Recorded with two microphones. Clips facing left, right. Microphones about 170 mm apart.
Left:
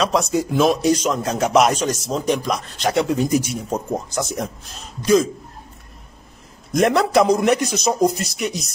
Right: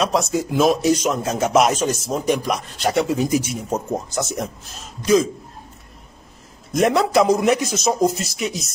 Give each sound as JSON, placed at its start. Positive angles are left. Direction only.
{"t": 0.0, "sound": "a man's voice", "side_deg": 0}
{"t": 6.7, "sound": "a man's voice", "side_deg": 0}